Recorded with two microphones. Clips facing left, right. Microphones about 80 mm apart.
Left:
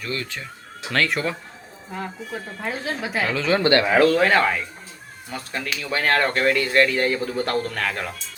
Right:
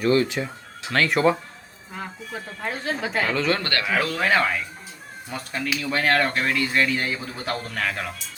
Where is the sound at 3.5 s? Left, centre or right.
Left.